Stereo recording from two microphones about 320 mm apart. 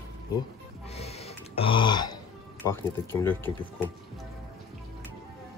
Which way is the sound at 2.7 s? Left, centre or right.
Centre.